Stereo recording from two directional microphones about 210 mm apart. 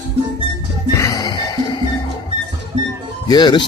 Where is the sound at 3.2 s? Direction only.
20° left (ahead or behind).